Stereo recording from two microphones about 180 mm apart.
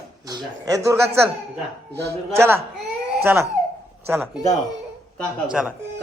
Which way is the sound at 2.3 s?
15° right (ahead or behind).